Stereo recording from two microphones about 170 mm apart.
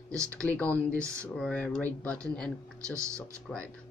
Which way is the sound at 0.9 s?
15° right (ahead or behind).